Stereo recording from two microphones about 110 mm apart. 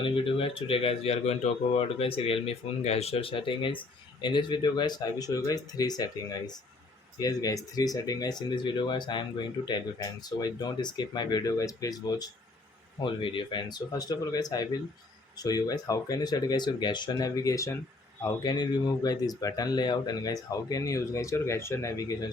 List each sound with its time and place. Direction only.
0.0 s speech: 55° left (ahead or behind); by 12.3 s 35° left (ahead or behind)
13.0 s speech: 50° left (ahead or behind); by 22.3 s 35° left (ahead or behind)